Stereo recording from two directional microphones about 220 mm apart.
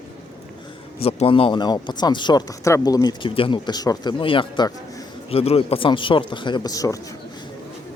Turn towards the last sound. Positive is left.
turn(degrees=15)  # may be behind; listen again after turning